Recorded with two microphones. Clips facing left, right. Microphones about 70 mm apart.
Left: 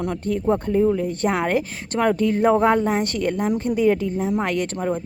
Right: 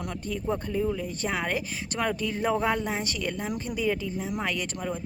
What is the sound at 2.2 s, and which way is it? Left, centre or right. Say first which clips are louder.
Speech: left 11 dB; left.